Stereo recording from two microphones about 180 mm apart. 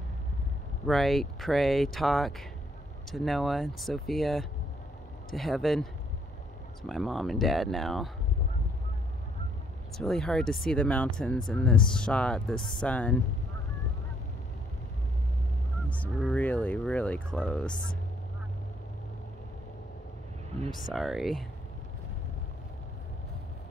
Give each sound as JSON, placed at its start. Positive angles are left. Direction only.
{"t": 0.8, "sound": "speech", "side_deg": 0}
{"t": 9.9, "sound": "speech", "side_deg": 0}
{"t": 15.9, "sound": "speech", "side_deg": 5}
{"t": 20.9, "sound": "speech", "side_deg": 0}